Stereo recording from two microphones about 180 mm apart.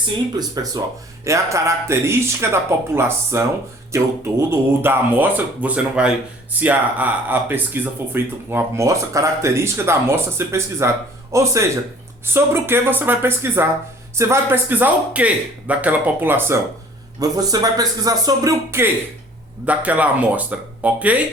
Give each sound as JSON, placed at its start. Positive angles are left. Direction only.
{"t": 0.3, "sound": "speech", "side_deg": -20}